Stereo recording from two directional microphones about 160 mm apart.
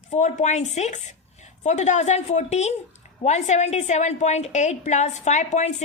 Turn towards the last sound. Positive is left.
turn(degrees=45)  # may be behind; listen again after turning